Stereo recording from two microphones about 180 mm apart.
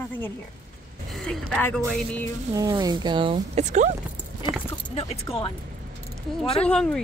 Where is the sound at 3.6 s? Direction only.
40° right (ahead or behind).